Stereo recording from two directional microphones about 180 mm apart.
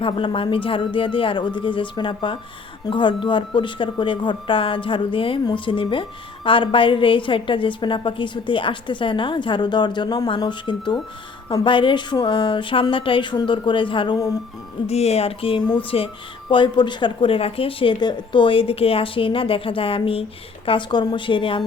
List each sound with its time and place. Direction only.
0.0 s speech: 30° left (ahead or behind)